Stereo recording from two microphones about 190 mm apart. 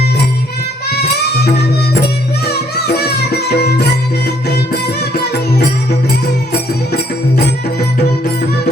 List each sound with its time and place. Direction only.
1.9 s music: 60° left (ahead or behind)